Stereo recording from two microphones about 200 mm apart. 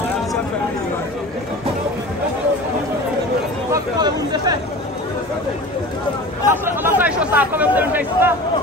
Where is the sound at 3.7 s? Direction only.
20° right (ahead or behind).